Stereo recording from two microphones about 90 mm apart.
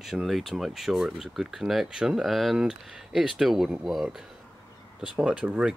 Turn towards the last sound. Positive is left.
turn(degrees=-10)  # may be behind; listen again after turning